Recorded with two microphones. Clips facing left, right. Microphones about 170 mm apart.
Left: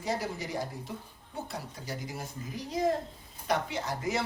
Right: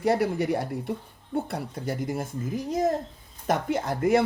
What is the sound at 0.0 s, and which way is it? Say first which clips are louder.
Speech: right 10 dB; 60° right (ahead or behind).